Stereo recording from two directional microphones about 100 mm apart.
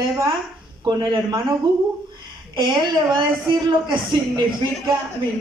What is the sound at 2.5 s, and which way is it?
A woman's voice, 50° right (ahead or behind).